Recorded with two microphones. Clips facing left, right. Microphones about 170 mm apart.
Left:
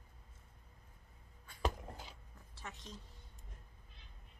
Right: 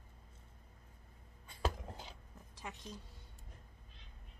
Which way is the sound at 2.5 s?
15° right (ahead or behind).